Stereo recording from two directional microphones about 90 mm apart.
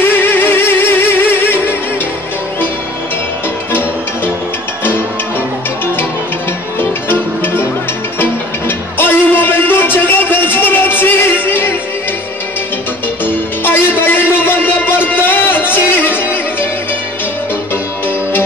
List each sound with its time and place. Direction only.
0.2 s music: 25° left (ahead or behind)
6.8 s music: 25° left (ahead or behind)
13.2 s music: 25° left (ahead or behind)